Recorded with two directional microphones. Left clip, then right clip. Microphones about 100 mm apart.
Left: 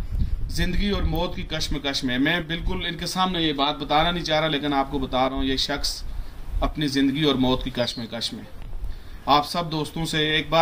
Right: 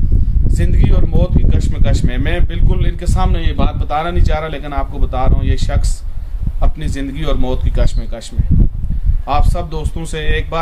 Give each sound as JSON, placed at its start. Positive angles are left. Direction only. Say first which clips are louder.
{"t": 0.6, "sound": "speech", "louder": "right 3 dB", "side_deg": -35}